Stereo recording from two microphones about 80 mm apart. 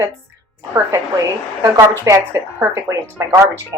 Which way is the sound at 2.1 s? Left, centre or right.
Right.